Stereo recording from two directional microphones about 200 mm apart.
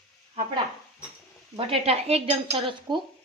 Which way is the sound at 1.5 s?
30° right (ahead or behind).